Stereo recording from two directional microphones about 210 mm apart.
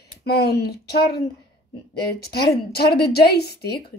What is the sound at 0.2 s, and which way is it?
A woman's voice, 50° left (ahead or behind).